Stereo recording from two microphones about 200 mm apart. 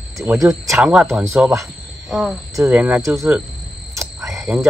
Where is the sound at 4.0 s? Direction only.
15° right (ahead or behind).